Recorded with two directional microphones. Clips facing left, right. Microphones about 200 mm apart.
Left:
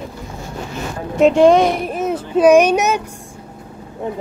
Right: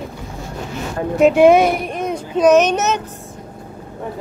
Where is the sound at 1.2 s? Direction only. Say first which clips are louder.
Even; 5° right (ahead or behind).